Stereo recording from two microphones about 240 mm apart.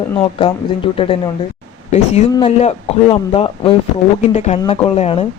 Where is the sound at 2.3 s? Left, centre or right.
Left.